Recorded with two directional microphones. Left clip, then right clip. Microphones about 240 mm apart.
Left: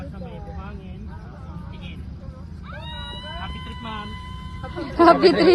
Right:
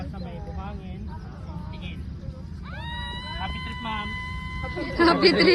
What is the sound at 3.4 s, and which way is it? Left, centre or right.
Vehicle, right.